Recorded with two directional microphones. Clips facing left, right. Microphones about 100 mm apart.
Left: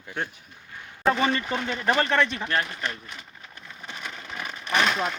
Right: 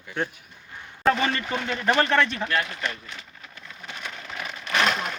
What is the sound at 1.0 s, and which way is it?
Speech, 10° left (ahead or behind).